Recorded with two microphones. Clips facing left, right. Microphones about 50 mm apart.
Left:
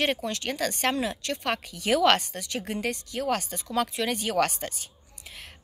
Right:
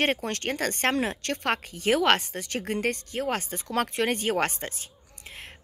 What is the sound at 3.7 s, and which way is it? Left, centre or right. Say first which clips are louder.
Speech: right 1 dB; right.